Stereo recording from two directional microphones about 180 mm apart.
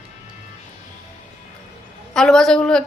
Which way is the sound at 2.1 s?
Centre (ahead or behind).